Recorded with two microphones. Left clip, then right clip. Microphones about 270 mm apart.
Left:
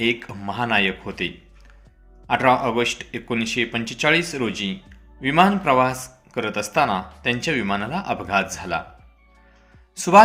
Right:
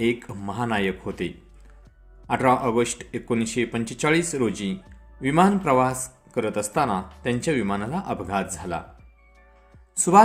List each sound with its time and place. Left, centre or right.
0.0 s a man's voice: centre
10.0 s a man's voice: centre